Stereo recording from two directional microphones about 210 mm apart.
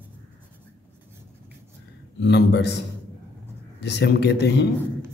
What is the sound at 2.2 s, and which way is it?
Speech, 55° left (ahead or behind).